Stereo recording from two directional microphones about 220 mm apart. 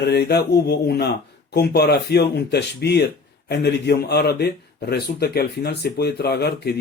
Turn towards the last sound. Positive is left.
turn(degrees=45)  # may be behind; listen again after turning